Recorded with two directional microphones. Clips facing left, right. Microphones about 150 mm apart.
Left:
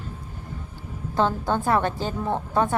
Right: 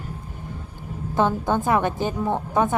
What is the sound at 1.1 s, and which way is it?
A woman's voice, 15° right (ahead or behind).